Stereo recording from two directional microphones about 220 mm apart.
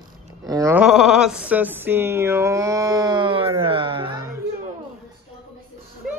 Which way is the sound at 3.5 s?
25° right (ahead or behind).